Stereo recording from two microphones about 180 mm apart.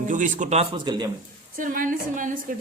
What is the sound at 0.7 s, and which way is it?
Speech, 25° right (ahead or behind).